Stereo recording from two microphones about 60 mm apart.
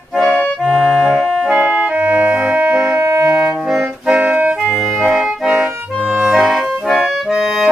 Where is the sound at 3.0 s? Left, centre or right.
Right.